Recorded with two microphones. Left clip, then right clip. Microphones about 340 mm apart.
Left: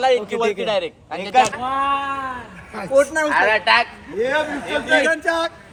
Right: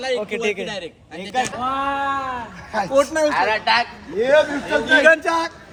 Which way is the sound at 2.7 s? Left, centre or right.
Centre.